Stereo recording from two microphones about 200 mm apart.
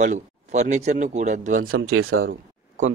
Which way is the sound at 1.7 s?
90° right.